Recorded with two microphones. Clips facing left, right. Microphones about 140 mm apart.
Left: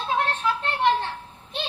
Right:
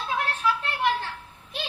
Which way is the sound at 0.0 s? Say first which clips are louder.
Left 2 dB; 30° left (ahead or behind).